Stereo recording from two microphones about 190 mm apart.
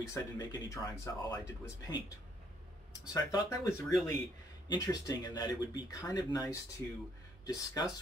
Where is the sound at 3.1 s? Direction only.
20° left (ahead or behind).